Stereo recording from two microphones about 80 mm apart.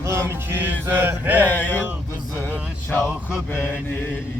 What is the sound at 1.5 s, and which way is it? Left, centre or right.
Music, left.